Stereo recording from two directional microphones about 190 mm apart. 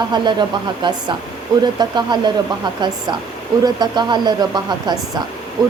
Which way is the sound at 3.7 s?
20° right (ahead or behind).